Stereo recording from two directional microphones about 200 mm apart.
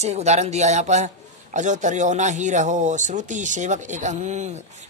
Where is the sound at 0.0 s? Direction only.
35° right (ahead or behind).